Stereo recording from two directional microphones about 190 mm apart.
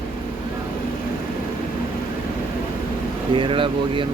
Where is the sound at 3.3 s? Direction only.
25° right (ahead or behind).